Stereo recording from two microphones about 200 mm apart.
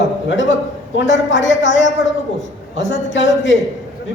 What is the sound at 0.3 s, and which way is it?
Speech, 65° left (ahead or behind).